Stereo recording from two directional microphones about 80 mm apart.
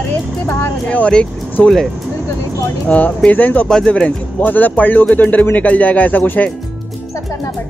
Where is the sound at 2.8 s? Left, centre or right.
Centre.